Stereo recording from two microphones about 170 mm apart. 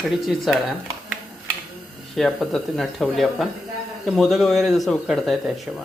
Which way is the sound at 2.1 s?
Centre (ahead or behind).